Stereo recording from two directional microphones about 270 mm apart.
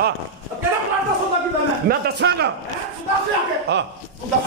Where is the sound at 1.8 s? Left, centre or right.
Right.